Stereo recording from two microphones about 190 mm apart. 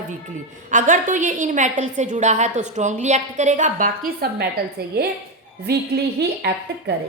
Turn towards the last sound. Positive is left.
turn(degrees=-60)  # may be behind; listen again after turning